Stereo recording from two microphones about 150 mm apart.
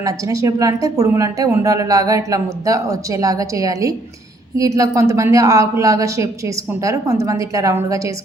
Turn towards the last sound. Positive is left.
turn(degrees=-20)  # may be behind; listen again after turning